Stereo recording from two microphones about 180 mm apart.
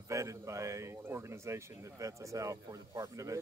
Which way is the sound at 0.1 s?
15° right (ahead or behind).